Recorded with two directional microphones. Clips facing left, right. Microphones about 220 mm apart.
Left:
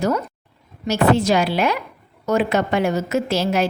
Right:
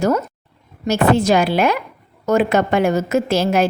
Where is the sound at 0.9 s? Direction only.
50° right (ahead or behind).